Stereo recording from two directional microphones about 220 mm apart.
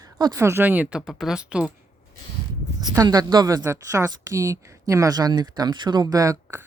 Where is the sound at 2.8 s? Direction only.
15° right (ahead or behind).